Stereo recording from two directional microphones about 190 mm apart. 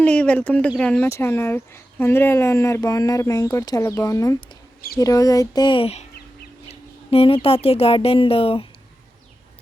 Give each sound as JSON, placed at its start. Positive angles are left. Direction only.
{"t": 0.0, "sound": "speech", "side_deg": 5}